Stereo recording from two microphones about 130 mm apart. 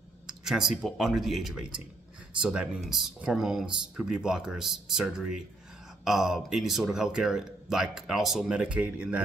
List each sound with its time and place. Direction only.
0.3 s speech: 5° right (ahead or behind)